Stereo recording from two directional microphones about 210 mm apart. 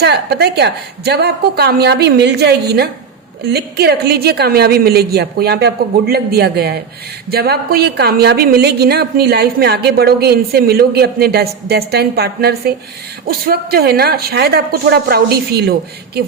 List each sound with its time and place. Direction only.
0.0 s a woman's voice: 50° right (ahead or behind)